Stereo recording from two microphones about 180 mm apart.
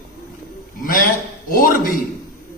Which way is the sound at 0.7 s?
50° left (ahead or behind).